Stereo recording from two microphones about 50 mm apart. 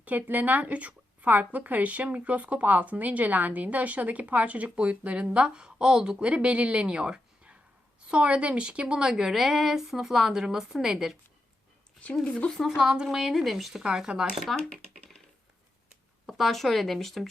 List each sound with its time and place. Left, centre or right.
0.0 s a woman's voice: right; by 10.9 s centre
12.2 s speech: centre
12.6 s speech: centre
13.8 s a woman's voice: centre
14.5 s speech: centre
16.2 s speech: centre